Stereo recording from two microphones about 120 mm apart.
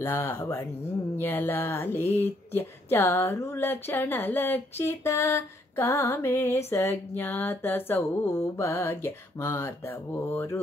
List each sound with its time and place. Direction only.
0.0 s speech: 20° left (ahead or behind)